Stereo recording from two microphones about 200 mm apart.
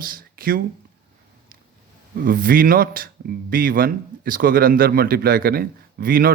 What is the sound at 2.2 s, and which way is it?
A man's voice, 45° right (ahead or behind).